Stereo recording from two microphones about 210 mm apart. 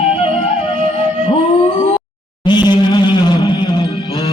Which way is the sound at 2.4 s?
20° left (ahead or behind).